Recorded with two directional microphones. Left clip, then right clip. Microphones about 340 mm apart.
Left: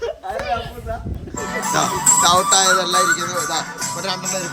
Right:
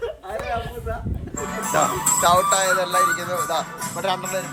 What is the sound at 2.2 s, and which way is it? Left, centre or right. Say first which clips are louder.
Speech: left 2 dB; centre.